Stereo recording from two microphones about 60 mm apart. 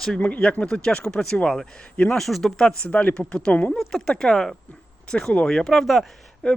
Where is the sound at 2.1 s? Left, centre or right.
Centre.